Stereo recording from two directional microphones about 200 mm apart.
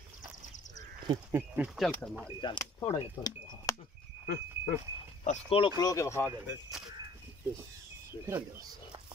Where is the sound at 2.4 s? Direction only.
20° left (ahead or behind).